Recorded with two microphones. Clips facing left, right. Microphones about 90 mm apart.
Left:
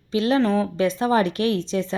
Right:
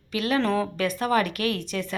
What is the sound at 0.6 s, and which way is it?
Speech, 25° left (ahead or behind).